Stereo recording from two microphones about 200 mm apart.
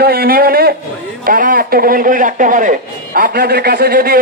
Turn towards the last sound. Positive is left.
turn(degrees=-50)  # may be behind; listen again after turning